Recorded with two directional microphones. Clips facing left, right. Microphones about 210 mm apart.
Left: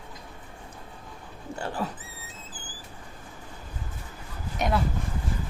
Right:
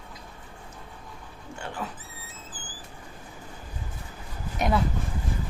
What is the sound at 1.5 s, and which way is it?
Speech, 40° left (ahead or behind).